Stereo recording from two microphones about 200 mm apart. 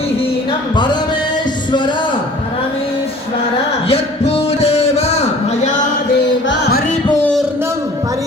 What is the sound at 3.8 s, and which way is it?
Music, 30° left (ahead or behind).